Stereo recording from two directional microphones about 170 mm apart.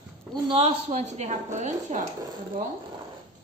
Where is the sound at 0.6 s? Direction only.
40° right (ahead or behind).